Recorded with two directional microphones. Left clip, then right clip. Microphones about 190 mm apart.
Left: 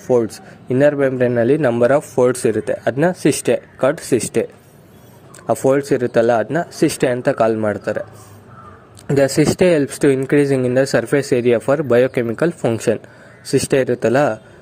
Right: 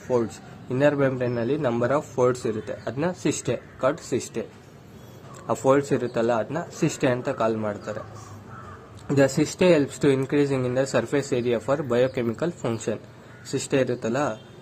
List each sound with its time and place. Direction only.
0.1 s a man's voice: 40° left (ahead or behind)
5.5 s a man's voice: 40° left (ahead or behind)
9.1 s a man's voice: 40° left (ahead or behind)